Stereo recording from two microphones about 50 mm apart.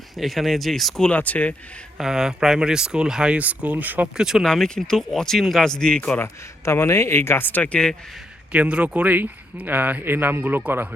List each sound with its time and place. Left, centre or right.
0.2 s speech: centre
1.1 s speech: left
2.0 s speech: centre
3.3 s speech: right
4.2 s speech: centre
4.4 s speech: centre
6.2 s speech: left
7.4 s speech: left
8.5 s speech: right